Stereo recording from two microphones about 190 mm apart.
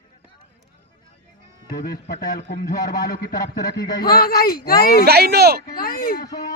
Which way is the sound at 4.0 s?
50° left (ahead or behind).